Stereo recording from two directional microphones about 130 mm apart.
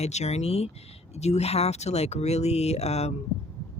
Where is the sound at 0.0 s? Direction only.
60° left (ahead or behind).